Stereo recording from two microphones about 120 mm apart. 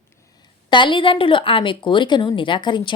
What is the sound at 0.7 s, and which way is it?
A woman's voice, 40° left (ahead or behind).